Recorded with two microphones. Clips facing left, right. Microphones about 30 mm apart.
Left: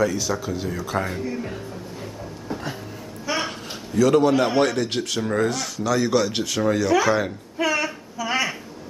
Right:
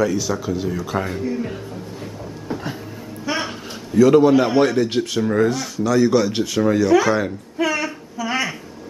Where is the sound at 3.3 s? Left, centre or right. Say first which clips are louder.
Right 2 dB; centre.